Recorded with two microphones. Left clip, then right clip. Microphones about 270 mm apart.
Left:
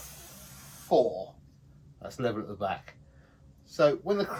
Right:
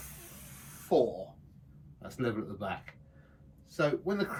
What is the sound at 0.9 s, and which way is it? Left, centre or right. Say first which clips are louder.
Speech: left 3 dB; centre.